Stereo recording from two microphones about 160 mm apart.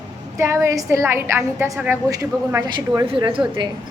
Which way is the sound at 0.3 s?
15° right (ahead or behind).